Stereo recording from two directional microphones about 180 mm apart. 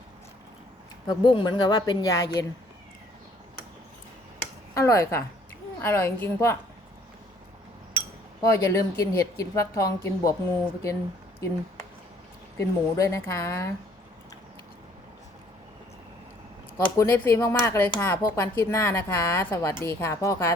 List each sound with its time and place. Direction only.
1.0 s a woman's voice: 25° left (ahead or behind)
4.7 s a woman's voice: 15° left (ahead or behind)
8.4 s a woman's voice: 15° left (ahead or behind)
12.5 s a woman's voice: 15° left (ahead or behind)
16.7 s a woman's voice: 15° left (ahead or behind)